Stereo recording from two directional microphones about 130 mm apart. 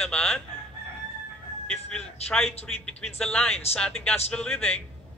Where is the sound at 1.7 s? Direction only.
5° left (ahead or behind).